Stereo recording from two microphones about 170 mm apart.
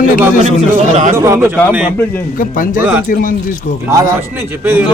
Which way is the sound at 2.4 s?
55° left (ahead or behind).